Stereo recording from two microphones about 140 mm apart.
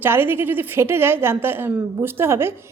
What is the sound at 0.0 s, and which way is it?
A woman's voice, 15° right (ahead or behind).